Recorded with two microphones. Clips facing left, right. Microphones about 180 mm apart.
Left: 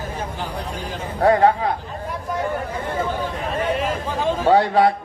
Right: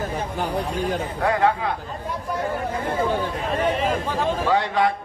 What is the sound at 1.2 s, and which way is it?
Speech, 40° left (ahead or behind).